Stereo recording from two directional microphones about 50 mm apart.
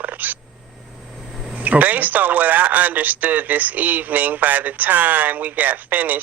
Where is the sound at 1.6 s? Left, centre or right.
Right.